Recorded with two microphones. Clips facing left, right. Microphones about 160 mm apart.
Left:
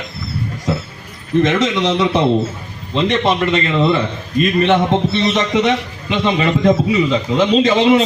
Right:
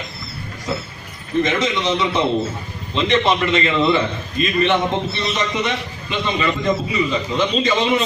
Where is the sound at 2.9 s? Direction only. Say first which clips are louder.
Left 2 dB; 55° left (ahead or behind).